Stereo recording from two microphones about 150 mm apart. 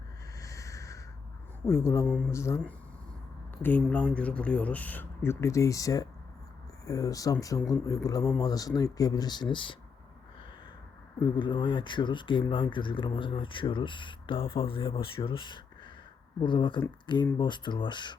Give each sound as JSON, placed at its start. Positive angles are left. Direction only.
{"t": 0.3, "sound": "a sound", "side_deg": 20}
{"t": 1.6, "sound": "speech", "side_deg": 15}
{"t": 3.6, "sound": "speech", "side_deg": 10}
{"t": 11.2, "sound": "speech", "side_deg": 30}